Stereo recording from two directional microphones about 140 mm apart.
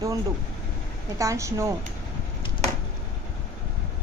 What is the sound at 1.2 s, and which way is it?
Speech, 20° right (ahead or behind).